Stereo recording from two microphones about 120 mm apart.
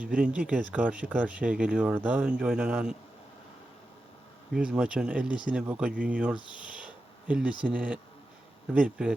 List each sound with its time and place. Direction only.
0.0 s speech: 10° right (ahead or behind)
4.5 s speech: 5° right (ahead or behind)
6.3 s speech: 40° left (ahead or behind)
7.3 s speech: 10° right (ahead or behind)